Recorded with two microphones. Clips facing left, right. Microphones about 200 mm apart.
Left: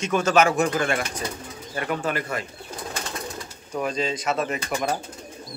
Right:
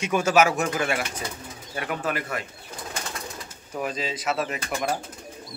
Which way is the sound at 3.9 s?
5° right (ahead or behind).